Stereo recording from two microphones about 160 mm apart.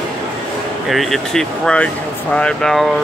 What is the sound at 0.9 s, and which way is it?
Speech, centre (ahead or behind).